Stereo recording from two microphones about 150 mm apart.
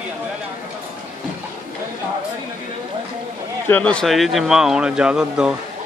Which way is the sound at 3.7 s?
10° left (ahead or behind).